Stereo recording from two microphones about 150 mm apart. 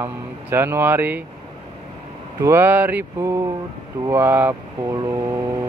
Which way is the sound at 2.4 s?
15° right (ahead or behind).